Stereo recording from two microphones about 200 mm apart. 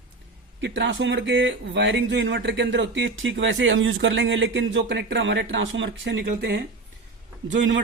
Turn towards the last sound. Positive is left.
turn(degrees=-65)  # may be behind; listen again after turning